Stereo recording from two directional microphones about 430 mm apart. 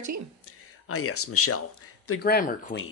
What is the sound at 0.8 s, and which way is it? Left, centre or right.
Speech, left.